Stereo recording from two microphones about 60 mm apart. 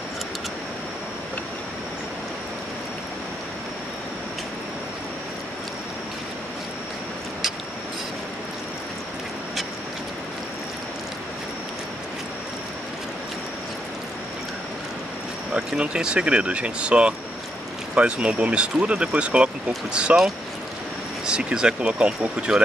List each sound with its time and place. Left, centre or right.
15.7 s speech: centre
21.3 s speech: centre